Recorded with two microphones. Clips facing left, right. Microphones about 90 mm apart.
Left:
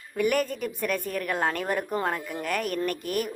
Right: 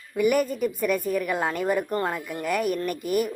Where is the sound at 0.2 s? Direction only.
5° right (ahead or behind).